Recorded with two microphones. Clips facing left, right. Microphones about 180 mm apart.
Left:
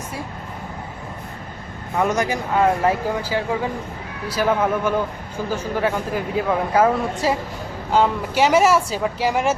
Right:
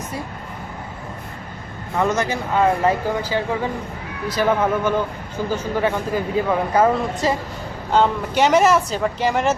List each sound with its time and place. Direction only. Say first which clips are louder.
2.0 s speech: even; 10° left (ahead or behind)
2.6 s speech: right 1 dB; 5° left (ahead or behind)